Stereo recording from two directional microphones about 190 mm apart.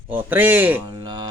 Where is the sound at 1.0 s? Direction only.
20° right (ahead or behind).